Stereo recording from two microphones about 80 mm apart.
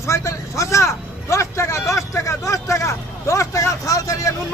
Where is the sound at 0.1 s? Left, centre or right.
Left.